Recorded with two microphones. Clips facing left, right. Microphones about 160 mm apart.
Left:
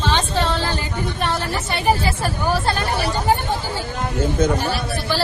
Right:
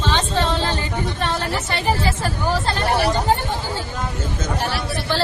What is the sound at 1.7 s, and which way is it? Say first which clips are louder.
A woman's voice: left 3 dB; 15° left (ahead or behind).